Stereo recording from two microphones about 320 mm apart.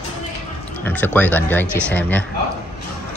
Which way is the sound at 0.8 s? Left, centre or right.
Centre.